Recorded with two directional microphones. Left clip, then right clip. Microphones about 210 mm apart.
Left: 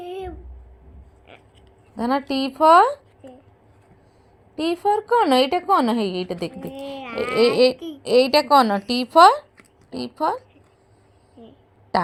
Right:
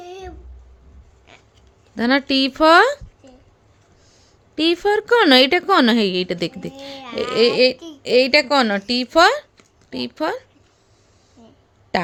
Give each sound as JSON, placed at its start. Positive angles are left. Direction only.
{"t": 0.0, "sound": "a sound", "side_deg": -20}
{"t": 2.0, "sound": "a woman's voice", "side_deg": -30}
{"t": 4.5, "sound": "a woman's voice", "side_deg": -30}